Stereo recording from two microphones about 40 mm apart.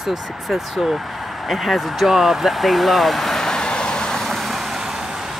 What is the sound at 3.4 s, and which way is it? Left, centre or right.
Vehicle, centre.